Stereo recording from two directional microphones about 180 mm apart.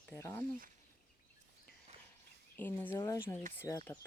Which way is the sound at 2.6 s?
10° left (ahead or behind).